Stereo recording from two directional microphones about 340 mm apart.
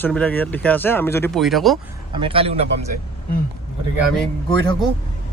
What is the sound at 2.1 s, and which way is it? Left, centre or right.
Speech, centre.